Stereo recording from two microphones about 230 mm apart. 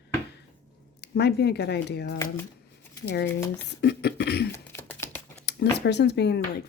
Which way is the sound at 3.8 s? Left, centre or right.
Left.